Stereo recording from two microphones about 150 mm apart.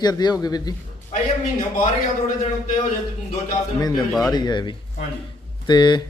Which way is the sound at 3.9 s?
Centre (ahead or behind).